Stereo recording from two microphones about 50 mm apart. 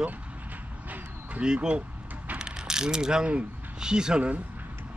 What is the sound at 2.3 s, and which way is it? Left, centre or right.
Mechanisms, centre.